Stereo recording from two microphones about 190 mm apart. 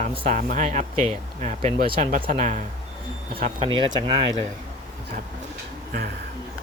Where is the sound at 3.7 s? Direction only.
25° right (ahead or behind).